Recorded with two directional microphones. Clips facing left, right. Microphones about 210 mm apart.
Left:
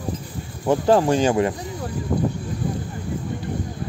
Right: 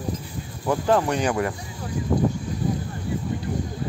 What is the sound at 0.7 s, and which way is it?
Speech, 30° left (ahead or behind).